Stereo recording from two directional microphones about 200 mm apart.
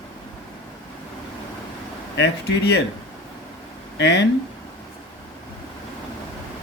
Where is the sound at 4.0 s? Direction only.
60° left (ahead or behind).